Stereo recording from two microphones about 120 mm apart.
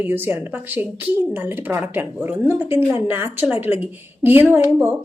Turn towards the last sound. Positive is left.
turn(degrees=-20)  # may be behind; listen again after turning